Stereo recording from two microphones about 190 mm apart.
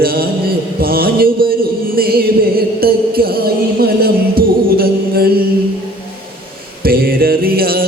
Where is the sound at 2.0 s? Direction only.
55° right (ahead or behind).